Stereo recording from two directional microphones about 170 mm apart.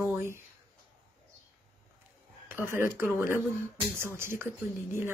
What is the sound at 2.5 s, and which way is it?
A woman's voice, 15° right (ahead or behind).